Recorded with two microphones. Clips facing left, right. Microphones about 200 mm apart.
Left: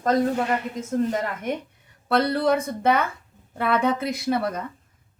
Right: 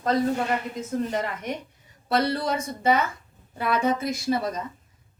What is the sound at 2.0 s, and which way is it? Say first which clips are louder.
A woman's voice: left 3 dB; 55° left (ahead or behind).